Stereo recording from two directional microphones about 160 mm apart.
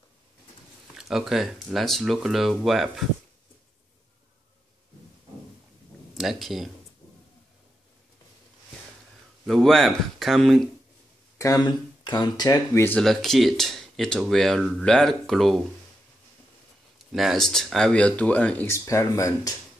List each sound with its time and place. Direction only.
0.9 s speech: centre (ahead or behind)
6.1 s speech: centre (ahead or behind)
9.5 s speech: centre (ahead or behind)
11.3 s speech: 20° left (ahead or behind)
13.0 s speech: centre (ahead or behind)
17.1 s speech: centre (ahead or behind); by 19.5 s 20° left (ahead or behind)